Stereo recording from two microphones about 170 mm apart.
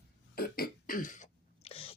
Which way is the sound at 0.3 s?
60° left (ahead or behind).